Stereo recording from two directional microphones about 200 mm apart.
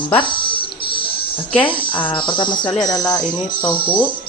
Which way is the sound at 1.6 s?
25° left (ahead or behind).